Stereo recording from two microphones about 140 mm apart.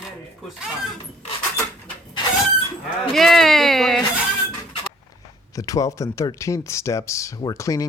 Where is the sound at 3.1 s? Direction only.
Centre (ahead or behind).